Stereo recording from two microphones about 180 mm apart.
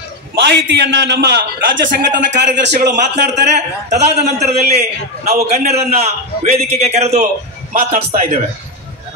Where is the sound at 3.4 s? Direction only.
40° right (ahead or behind).